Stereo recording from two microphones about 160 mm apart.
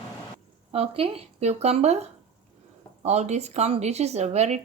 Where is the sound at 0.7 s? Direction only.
40° right (ahead or behind).